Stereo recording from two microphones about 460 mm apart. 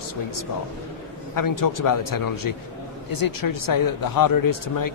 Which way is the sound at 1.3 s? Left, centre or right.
Left.